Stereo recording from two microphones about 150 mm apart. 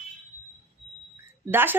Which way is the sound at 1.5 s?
15° right (ahead or behind).